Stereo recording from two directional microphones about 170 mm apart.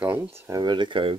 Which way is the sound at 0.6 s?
25° right (ahead or behind).